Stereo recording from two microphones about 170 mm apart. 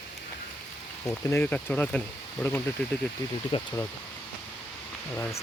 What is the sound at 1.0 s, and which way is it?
Speech, 15° left (ahead or behind).